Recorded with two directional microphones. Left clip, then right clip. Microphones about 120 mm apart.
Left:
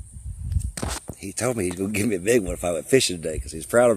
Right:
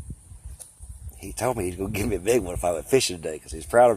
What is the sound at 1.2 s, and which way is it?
Speech, 90° left.